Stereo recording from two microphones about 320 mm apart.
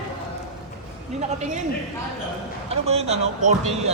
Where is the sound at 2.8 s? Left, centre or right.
Centre.